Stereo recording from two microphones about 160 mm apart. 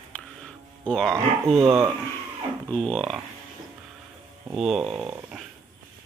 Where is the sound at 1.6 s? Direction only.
15° right (ahead or behind).